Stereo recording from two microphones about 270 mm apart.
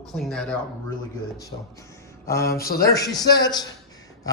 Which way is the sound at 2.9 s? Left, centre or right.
Centre.